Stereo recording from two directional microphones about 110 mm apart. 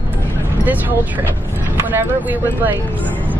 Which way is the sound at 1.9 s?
15° right (ahead or behind).